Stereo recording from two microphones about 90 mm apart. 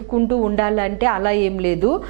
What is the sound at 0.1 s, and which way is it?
A woman's voice, 25° right (ahead or behind).